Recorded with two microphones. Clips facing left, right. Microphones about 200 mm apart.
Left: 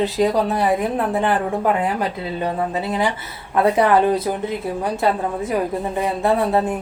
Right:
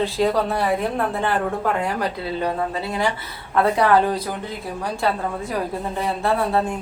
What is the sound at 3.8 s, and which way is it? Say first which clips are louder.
Speech: left 3 dB; 20° left (ahead or behind).